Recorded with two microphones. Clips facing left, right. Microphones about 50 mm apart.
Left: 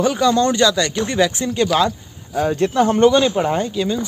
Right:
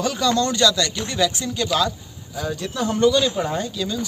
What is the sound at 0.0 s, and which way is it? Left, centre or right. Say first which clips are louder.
Speech: left 5 dB; left.